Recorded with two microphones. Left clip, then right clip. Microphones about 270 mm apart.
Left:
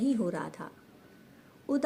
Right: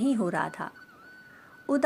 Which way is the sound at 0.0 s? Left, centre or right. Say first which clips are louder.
Right 4 dB; right.